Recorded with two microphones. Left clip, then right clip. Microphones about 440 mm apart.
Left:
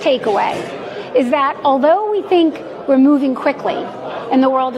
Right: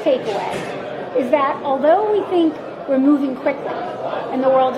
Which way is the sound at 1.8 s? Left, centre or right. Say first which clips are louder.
Left 1 dB; left.